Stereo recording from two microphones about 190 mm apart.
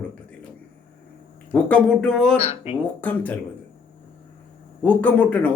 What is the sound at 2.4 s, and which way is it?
Speech, 35° left (ahead or behind).